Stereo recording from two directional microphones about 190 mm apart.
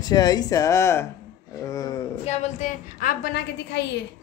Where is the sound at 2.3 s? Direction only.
40° left (ahead or behind); by 3.9 s 60° left (ahead or behind).